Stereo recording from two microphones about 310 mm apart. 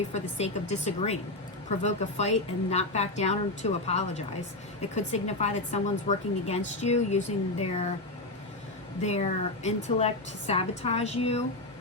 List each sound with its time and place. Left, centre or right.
0.1 s a woman's voice: left
9.0 s a woman's voice: left